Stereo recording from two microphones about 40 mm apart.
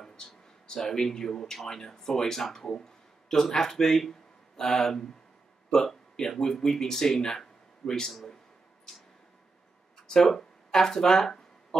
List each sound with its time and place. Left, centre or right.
0.0 s a sound: centre
0.7 s a man's voice: centre
10.0 s speech: centre